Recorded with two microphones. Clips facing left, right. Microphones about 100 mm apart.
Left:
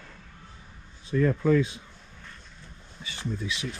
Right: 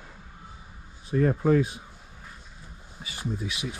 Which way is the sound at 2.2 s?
10° right (ahead or behind).